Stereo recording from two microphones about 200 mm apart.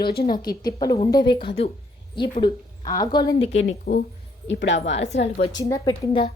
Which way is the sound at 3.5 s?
70° left (ahead or behind).